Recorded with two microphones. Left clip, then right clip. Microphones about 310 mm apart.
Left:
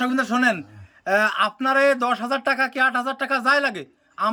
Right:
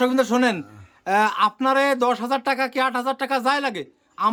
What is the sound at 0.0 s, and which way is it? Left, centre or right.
A man's voice, centre.